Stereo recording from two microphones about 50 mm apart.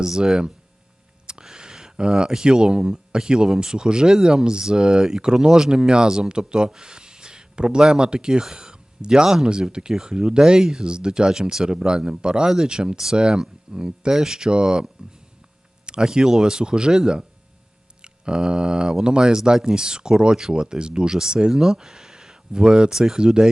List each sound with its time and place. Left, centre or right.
0.0 s speech: centre
15.9 s speech: centre